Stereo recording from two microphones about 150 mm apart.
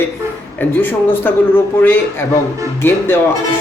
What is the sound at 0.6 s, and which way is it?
A man's voice, 15° left (ahead or behind).